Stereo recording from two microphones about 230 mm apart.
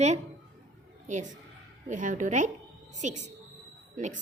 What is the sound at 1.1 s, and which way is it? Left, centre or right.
A woman's voice, right.